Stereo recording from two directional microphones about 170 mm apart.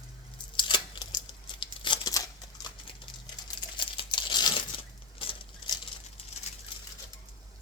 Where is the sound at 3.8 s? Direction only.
30° left (ahead or behind).